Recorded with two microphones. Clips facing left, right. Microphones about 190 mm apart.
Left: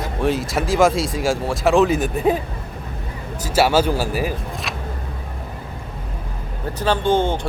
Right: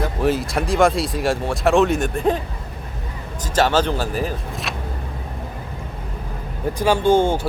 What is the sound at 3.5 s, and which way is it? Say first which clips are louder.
Speech: left 1 dB; 10° left (ahead or behind).